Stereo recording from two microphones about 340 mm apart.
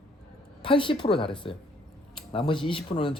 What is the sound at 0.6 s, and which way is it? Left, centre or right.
Speech, centre.